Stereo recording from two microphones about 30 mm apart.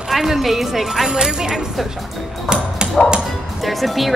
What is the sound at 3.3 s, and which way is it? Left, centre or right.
Music, centre.